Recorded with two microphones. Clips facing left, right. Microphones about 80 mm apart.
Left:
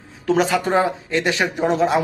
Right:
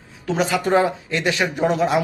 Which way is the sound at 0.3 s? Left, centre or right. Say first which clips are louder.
Left 2 dB; left.